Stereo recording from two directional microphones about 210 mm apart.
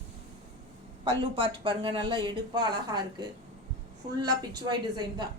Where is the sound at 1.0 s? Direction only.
25° right (ahead or behind).